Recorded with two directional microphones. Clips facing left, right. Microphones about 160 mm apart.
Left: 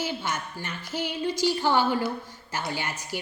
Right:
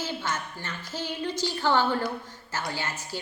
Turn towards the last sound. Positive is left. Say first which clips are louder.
# left 1 dB
turn(degrees=15)  # may be behind; listen again after turning